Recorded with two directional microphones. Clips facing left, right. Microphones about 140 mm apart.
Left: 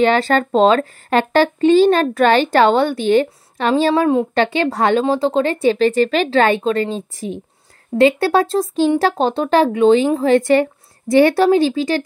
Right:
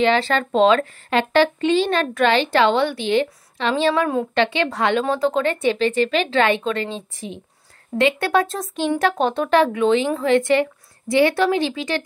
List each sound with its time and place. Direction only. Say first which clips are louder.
0.0 s speech: left 4 dB; 45° left (ahead or behind); by 4.3 s 30° left (ahead or behind)
4.4 s speech: left 3 dB; 40° left (ahead or behind)